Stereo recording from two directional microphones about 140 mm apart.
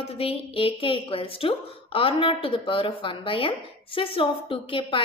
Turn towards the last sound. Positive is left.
turn(degrees=40)  # may be behind; listen again after turning